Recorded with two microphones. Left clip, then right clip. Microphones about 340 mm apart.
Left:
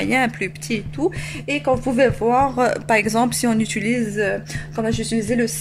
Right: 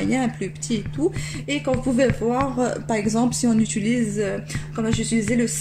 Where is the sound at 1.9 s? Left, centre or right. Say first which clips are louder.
Left 4 dB; left.